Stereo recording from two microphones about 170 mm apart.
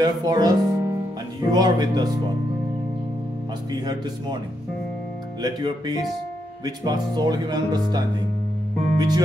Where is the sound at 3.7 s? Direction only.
20° right (ahead or behind).